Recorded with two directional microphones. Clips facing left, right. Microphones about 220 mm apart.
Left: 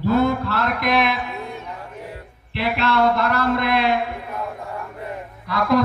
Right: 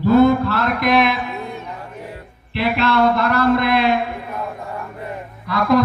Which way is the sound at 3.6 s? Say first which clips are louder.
Right 3 dB; 70° right (ahead or behind).